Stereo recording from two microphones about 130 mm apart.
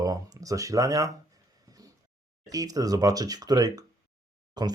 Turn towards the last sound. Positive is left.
turn(degrees=-30)  # may be behind; listen again after turning